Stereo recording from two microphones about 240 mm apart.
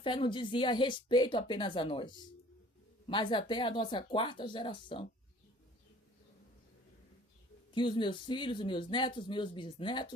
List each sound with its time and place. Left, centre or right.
0.0 s speech: centre
3.1 s speech: centre
7.7 s speech: centre